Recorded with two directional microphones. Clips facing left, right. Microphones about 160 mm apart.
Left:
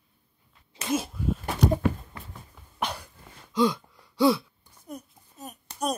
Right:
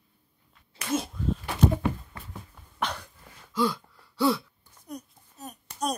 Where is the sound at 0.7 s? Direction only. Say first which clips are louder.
Left 2 dB; 15° left (ahead or behind).